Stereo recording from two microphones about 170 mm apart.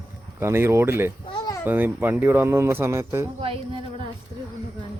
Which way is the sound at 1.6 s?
10° right (ahead or behind).